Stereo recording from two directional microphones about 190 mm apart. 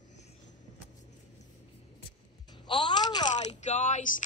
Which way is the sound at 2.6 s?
25° left (ahead or behind).